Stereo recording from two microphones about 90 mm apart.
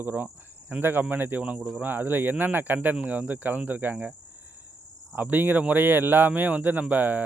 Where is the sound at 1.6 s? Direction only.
5° right (ahead or behind).